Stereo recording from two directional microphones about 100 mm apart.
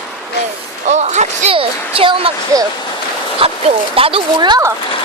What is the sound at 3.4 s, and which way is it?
Speech, 70° right (ahead or behind).